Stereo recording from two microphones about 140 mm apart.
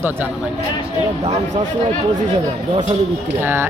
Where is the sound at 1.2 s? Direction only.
60° right (ahead or behind).